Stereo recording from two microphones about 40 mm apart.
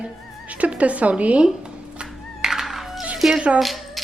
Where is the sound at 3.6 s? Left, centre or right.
Centre.